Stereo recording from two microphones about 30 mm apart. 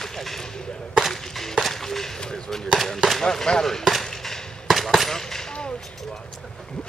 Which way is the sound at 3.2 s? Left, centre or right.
Centre.